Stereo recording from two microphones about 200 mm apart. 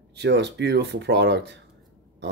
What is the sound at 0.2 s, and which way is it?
Speech, 60° right (ahead or behind).